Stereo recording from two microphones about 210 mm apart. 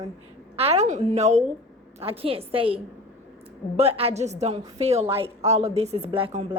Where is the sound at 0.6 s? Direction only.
30° right (ahead or behind).